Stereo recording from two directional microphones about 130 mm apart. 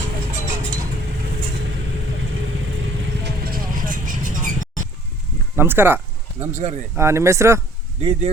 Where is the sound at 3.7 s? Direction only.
90° right.